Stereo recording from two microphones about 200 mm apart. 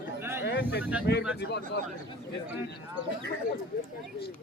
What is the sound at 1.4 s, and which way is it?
Speech, 55° left (ahead or behind).